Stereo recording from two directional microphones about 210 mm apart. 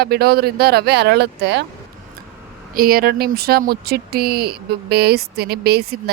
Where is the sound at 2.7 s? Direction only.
45° right (ahead or behind).